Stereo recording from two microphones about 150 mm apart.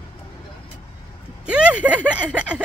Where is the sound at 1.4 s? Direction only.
5° right (ahead or behind).